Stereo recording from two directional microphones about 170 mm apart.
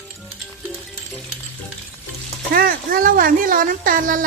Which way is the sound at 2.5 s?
60° right (ahead or behind).